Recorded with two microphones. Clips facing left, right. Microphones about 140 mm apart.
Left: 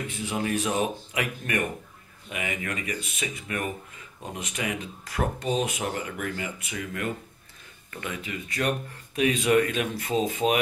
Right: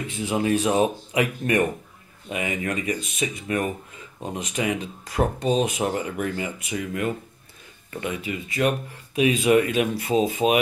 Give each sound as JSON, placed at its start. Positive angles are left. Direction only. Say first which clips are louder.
{"t": 0.3, "sound": "speech", "louder": "right 6 dB", "side_deg": -25}
{"t": 8.2, "sound": "speech", "louder": "right 6 dB", "side_deg": -10}